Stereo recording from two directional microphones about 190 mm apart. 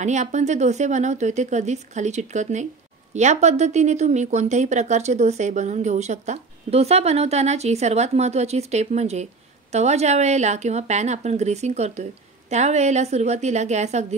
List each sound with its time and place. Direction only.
0.0 s speech: 40° right (ahead or behind)